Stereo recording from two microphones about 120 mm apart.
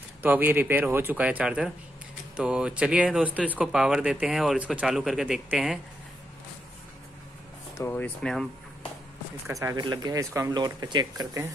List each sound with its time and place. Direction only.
0.2 s speech: 15° right (ahead or behind)
7.8 s speech: 15° left (ahead or behind)
8.2 s speech: 5° left (ahead or behind)
9.5 s speech: 30° right (ahead or behind)